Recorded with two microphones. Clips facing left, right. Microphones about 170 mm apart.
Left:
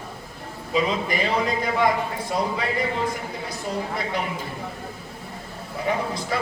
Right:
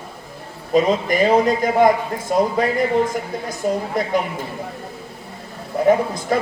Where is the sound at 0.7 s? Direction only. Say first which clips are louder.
Right 7 dB; 45° right (ahead or behind).